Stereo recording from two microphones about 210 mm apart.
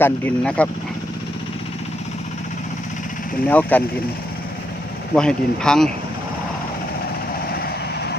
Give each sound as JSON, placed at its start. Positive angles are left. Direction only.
{"t": 0.0, "sound": "speech", "side_deg": 5}
{"t": 3.4, "sound": "speech", "side_deg": 5}
{"t": 5.1, "sound": "speech", "side_deg": 5}
{"t": 7.5, "sound": "vehicle", "side_deg": 50}